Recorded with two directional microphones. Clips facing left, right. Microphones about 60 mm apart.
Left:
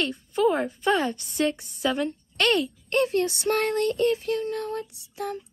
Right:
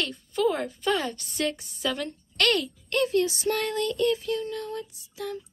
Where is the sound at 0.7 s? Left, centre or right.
Left.